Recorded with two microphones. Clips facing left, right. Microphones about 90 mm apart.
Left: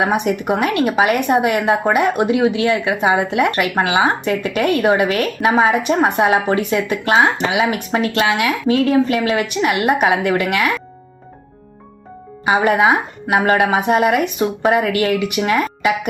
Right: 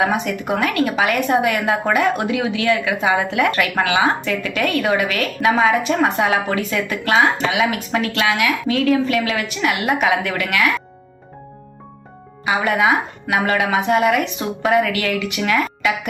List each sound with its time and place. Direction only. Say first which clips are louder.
0.1 s speech: left 3 dB; 20° left (ahead or behind)
2.2 s speech: left 4 dB; 25° left (ahead or behind)
5.8 s speech: left 2 dB; 20° left (ahead or behind)
12.5 s speech: left 3 dB; 30° left (ahead or behind)